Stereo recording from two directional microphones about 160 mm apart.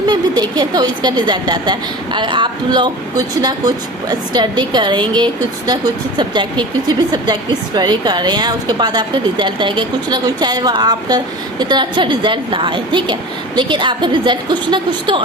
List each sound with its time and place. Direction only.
0.1 s a woman's voice: 25° right (ahead or behind)